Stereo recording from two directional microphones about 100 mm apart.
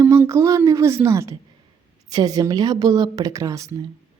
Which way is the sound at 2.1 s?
40° right (ahead or behind).